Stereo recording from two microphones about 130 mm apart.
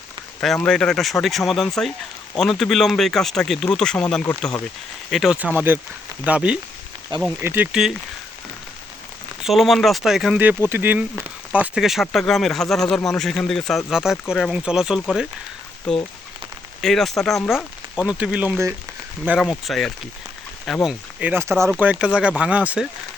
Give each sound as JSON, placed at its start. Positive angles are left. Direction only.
{"t": 0.4, "sound": "speech", "side_deg": 5}
{"t": 5.1, "sound": "speech", "side_deg": -5}
{"t": 5.5, "sound": "speech", "side_deg": -15}
{"t": 7.7, "sound": "speech", "side_deg": -5}
{"t": 9.4, "sound": "speech", "side_deg": 0}
{"t": 10.4, "sound": "speech", "side_deg": -15}
{"t": 17.9, "sound": "speech", "side_deg": -5}
{"t": 19.4, "sound": "speech", "side_deg": 0}
{"t": 20.8, "sound": "speech", "side_deg": -10}
{"t": 21.7, "sound": "speech", "side_deg": -10}